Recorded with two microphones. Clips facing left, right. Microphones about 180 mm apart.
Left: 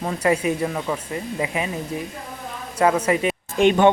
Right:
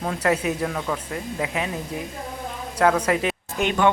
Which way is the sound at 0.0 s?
10° left (ahead or behind).